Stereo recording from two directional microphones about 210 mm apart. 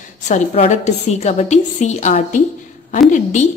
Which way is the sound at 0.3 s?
35° left (ahead or behind).